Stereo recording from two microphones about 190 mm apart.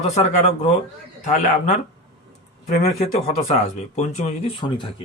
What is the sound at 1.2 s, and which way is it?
Speech, 40° left (ahead or behind).